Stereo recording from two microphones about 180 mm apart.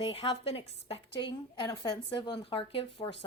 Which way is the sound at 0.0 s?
30° left (ahead or behind).